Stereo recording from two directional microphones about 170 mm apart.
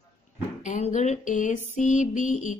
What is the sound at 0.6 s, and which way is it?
A woman's voice, 45° left (ahead or behind).